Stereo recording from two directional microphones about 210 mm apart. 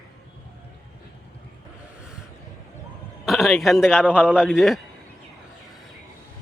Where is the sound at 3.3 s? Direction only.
Centre (ahead or behind).